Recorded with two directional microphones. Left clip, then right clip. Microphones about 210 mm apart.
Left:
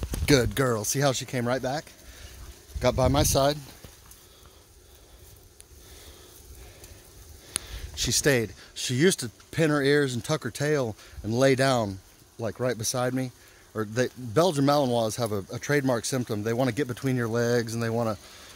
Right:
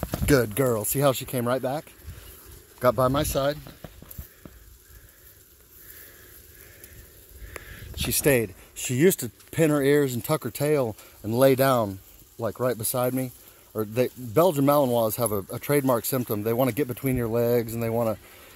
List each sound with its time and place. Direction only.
0.2 s speech: 10° left (ahead or behind)
3.1 s speech: 20° left (ahead or behind)
7.6 s a sound: 20° left (ahead or behind)
8.1 s speech: centre (ahead or behind)